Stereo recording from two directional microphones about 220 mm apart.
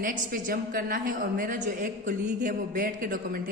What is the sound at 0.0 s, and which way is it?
A woman's voice, 40° right (ahead or behind).